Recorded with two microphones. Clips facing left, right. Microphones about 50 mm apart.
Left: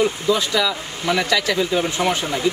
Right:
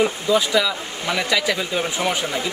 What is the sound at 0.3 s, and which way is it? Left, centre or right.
Speech, centre.